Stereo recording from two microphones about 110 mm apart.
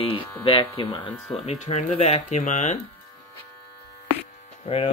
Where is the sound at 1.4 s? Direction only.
75° left (ahead or behind); by 2.8 s 90° left.